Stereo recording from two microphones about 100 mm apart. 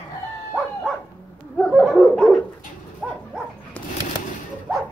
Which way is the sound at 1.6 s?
Centre (ahead or behind).